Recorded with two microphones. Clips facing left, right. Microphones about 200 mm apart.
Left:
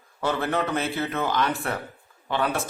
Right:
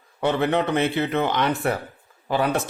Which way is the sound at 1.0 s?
20° right (ahead or behind).